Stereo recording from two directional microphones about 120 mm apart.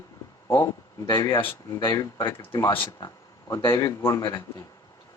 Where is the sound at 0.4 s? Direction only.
20° left (ahead or behind).